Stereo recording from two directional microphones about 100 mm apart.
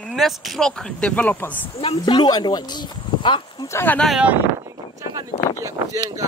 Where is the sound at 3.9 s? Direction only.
Centre (ahead or behind).